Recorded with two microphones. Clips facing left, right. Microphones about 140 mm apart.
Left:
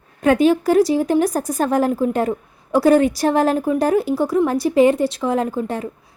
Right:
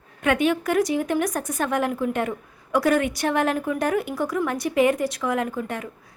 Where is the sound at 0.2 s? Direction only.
35° left (ahead or behind).